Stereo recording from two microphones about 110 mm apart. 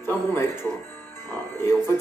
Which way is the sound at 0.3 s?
20° left (ahead or behind).